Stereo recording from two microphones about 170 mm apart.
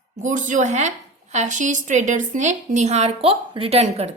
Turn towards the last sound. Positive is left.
turn(degrees=-40)  # may be behind; listen again after turning